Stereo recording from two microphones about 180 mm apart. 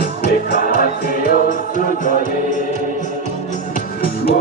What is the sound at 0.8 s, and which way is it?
Music, 55° left (ahead or behind).